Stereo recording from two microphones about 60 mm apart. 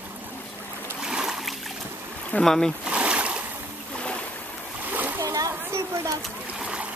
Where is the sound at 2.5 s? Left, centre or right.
Centre.